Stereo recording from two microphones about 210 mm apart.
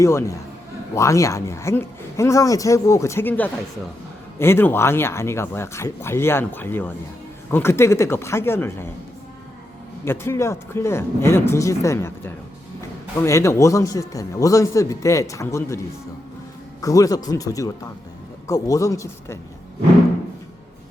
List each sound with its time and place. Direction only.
0.0 s speech: 15° left (ahead or behind)
10.0 s speech: 10° left (ahead or behind)
16.8 s speech: 15° left (ahead or behind)